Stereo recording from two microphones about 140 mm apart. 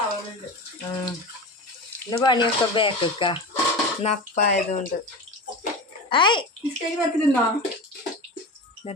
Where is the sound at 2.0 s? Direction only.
35° left (ahead or behind).